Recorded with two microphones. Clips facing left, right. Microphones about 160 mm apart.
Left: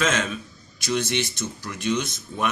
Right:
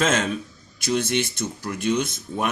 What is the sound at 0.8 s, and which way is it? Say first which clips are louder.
Speech: right 2 dB; 55° right (ahead or behind).